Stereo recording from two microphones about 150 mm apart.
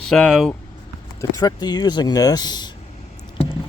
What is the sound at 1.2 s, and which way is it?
Speech, 25° left (ahead or behind).